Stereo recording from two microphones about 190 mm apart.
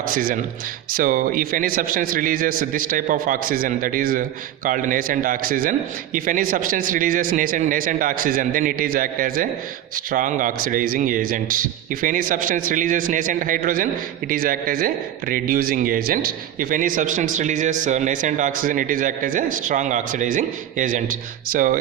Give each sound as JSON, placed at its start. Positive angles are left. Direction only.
{"t": 0.1, "sound": "speech", "side_deg": -45}